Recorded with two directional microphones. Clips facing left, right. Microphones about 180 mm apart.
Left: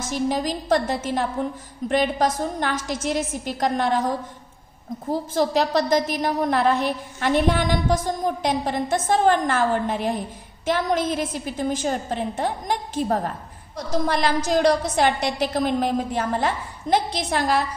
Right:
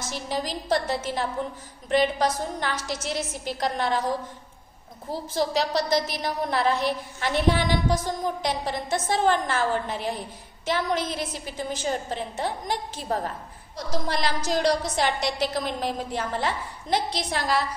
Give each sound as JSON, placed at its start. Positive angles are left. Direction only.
{"t": 0.0, "sound": "a woman's voice", "side_deg": 50}
{"t": 5.1, "sound": "a woman's voice", "side_deg": 50}